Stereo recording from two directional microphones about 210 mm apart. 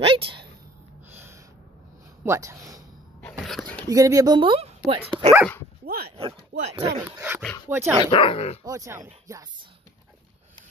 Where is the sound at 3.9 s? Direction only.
15° right (ahead or behind).